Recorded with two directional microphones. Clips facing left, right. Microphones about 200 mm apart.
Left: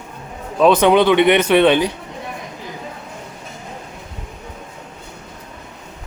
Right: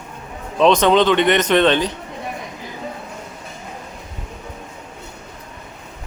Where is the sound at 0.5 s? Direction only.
5° left (ahead or behind).